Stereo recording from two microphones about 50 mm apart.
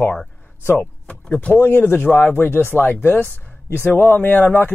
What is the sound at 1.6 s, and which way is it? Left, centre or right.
Speech, left.